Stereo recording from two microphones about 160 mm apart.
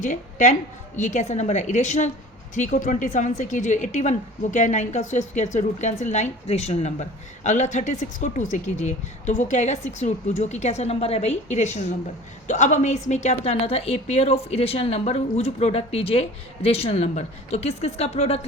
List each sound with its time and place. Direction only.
0.0 s a woman's voice: 50° left (ahead or behind)